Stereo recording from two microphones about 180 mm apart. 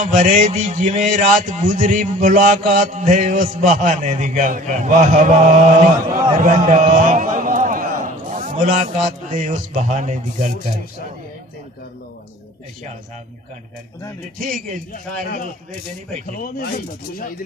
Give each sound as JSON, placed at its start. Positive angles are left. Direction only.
{"t": 0.0, "sound": "a man's voice", "side_deg": -45}
{"t": 14.4, "sound": "a man's voice", "side_deg": -45}
{"t": 16.3, "sound": "speech", "side_deg": 55}